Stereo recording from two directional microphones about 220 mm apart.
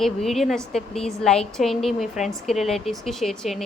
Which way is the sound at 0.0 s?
Centre (ahead or behind).